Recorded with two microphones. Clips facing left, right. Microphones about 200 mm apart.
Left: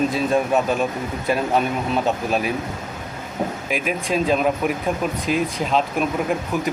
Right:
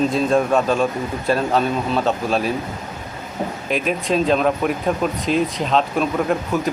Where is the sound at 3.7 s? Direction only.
10° left (ahead or behind).